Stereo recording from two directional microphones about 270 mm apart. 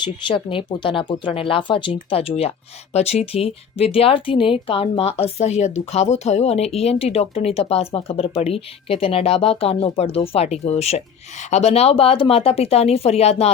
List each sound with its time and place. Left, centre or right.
0.0 s speech: centre